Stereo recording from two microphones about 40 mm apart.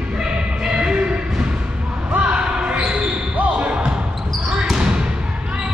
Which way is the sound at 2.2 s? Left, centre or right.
Right.